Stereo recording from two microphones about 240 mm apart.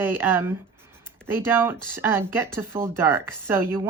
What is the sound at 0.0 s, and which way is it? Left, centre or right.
Speech, centre.